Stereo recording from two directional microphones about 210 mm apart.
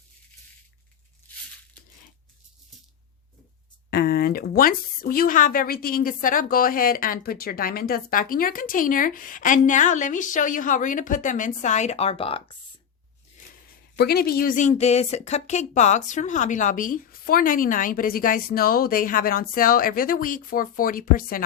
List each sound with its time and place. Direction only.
3.8 s speech: 50° left (ahead or behind); by 12.4 s 25° left (ahead or behind)
13.9 s speech: 50° left (ahead or behind)